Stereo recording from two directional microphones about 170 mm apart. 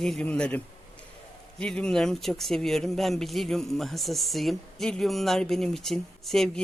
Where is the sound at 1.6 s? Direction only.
5° left (ahead or behind).